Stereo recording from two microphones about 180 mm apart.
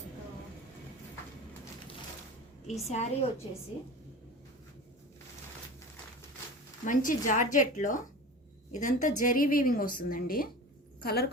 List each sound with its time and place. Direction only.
2.6 s a woman's voice: 35° left (ahead or behind)
6.8 s a woman's voice: 45° left (ahead or behind)